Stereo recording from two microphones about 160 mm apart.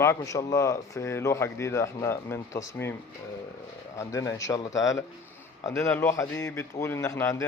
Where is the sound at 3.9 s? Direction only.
20° left (ahead or behind).